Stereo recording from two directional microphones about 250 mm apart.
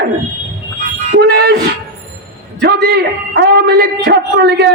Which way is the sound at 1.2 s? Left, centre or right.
Right.